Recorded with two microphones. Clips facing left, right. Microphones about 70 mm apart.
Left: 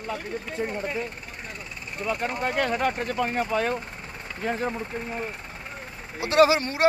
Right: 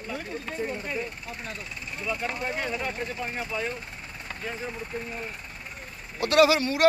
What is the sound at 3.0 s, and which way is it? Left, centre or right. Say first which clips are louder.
Speech: left 6 dB; left.